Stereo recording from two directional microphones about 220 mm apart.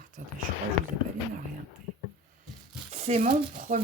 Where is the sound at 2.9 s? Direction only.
30° right (ahead or behind).